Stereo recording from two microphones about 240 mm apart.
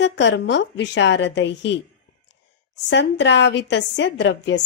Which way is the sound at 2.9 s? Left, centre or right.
Left.